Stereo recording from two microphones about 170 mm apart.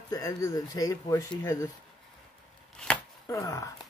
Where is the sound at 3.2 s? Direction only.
20° left (ahead or behind).